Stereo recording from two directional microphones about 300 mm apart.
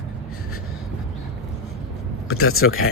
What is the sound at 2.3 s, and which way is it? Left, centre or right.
Speech, left.